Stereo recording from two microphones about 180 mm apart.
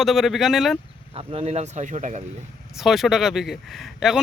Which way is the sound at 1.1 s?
30° right (ahead or behind).